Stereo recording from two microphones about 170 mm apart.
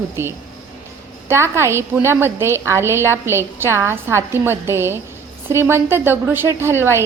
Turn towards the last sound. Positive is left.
turn(degrees=-15)  # may be behind; listen again after turning